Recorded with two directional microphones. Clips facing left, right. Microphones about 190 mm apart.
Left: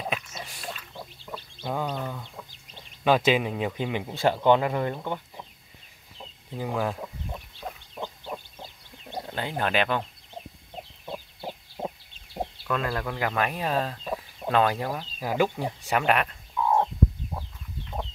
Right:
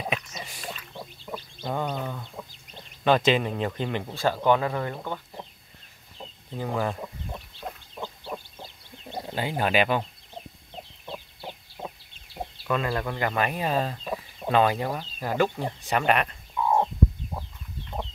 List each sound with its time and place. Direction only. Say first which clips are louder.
0.0 s a sound: right 1 dB; centre (ahead or behind)
3.0 s speech: even; 5° left (ahead or behind)
4.1 s speech: left 2 dB; 20° left (ahead or behind)
6.1 s chicken: even; 5° left (ahead or behind)
9.2 s speech: right 2 dB; 5° right (ahead or behind)
12.6 s chicken: right 3 dB; 5° right (ahead or behind)